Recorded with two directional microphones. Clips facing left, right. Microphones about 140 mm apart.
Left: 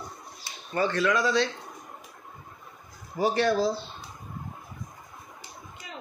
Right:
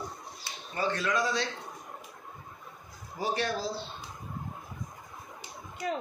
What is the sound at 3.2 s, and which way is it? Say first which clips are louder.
Speech: left 8 dB; 70° left (ahead or behind).